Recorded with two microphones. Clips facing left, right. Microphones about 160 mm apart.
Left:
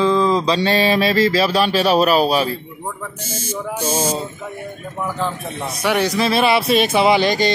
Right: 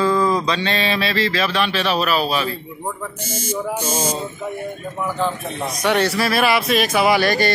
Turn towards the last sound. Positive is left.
turn(degrees=20)  # may be behind; listen again after turning